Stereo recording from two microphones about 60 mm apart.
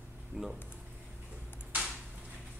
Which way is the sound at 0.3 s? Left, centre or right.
Centre.